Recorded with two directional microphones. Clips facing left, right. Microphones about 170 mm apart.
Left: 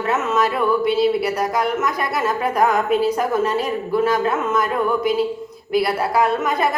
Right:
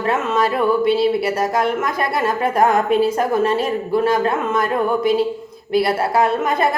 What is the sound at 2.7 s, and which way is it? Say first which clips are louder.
Speech: right 2 dB; 50° right (ahead or behind).